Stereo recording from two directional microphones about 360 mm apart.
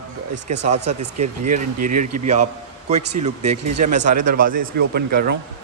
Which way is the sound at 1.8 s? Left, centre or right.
Right.